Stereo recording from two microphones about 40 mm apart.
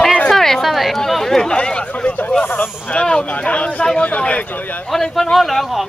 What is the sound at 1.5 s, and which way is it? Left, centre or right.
Speech, left.